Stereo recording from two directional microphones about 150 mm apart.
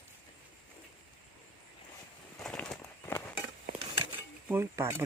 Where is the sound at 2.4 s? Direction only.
5° left (ahead or behind).